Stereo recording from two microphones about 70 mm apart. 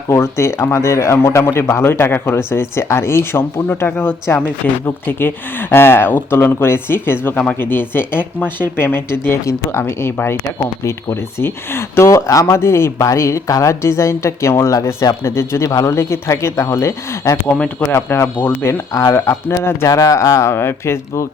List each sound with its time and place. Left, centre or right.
0.1 s speech: left
12.0 s speech: left
20.5 s speech: left